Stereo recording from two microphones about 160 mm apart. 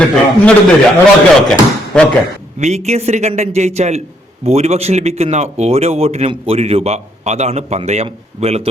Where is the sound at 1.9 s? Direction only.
5° left (ahead or behind).